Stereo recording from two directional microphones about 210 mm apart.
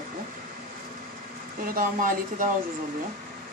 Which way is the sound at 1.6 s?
40° right (ahead or behind).